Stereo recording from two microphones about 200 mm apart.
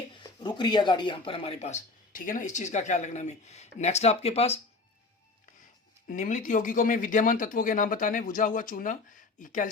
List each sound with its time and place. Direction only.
0.2 s speech: 20° left (ahead or behind)
6.1 s speech: 40° left (ahead or behind)